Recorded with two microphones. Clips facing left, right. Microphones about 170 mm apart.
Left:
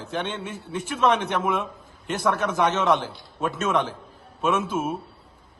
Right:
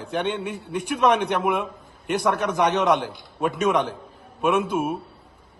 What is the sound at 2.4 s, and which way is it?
A man's voice, 15° right (ahead or behind).